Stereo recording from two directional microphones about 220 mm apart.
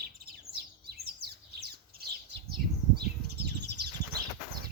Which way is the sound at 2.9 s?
45° right (ahead or behind).